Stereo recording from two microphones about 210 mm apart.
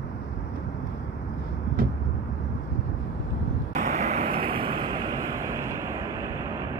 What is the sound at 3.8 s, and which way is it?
Vehicle, 35° right (ahead or behind).